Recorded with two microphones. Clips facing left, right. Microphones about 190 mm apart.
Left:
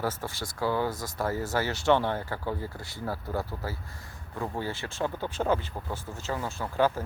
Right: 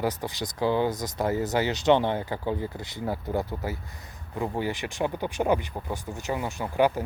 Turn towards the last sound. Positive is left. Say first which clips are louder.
# right 3 dB
turn(degrees=-15)  # may be behind; listen again after turning